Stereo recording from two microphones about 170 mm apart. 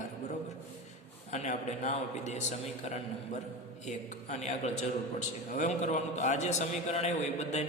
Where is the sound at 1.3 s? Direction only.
40° left (ahead or behind).